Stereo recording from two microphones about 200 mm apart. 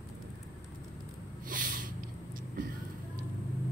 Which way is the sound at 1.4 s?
45° right (ahead or behind).